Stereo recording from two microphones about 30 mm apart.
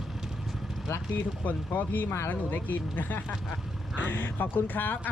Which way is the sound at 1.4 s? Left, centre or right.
Left.